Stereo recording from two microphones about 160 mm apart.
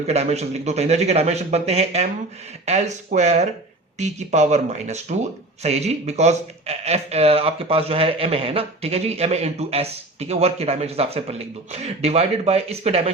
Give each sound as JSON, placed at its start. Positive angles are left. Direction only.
{"t": 0.1, "sound": "a man's voice", "side_deg": -40}